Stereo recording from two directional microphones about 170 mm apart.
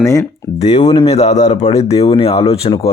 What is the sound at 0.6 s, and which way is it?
Speech, 40° left (ahead or behind).